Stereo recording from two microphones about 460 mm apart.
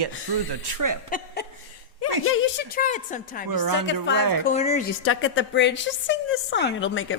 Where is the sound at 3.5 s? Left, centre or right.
Right.